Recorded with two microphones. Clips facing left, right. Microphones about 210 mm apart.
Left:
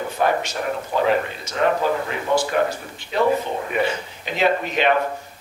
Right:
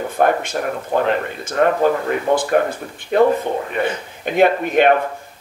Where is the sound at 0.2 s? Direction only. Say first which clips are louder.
Right 4 dB; 55° right (ahead or behind).